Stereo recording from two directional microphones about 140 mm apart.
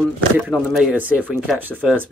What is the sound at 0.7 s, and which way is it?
Speech, centre (ahead or behind).